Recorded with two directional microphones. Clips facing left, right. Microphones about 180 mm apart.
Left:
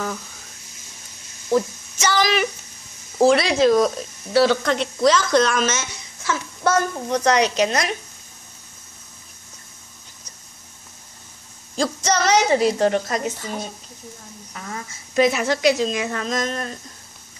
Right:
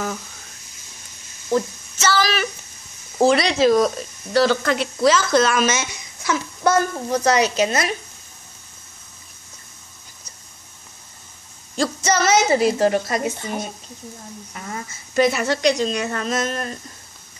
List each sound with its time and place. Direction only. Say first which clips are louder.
1.5 s speech: left 1 dB; 15° left (ahead or behind)
3.2 s speech: left 1 dB; centre (ahead or behind)
11.7 s speech: right 1 dB; 5° right (ahead or behind)
14.5 s speech: even; centre (ahead or behind)